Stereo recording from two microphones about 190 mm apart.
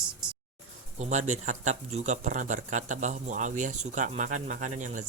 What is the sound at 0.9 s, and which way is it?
A man's voice, 40° right (ahead or behind).